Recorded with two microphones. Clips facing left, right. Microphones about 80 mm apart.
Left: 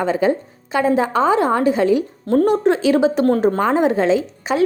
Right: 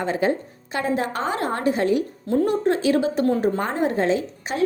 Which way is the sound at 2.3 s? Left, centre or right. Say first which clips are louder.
Left 5 dB; left.